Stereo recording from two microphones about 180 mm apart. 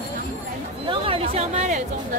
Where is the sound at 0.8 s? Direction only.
30° right (ahead or behind).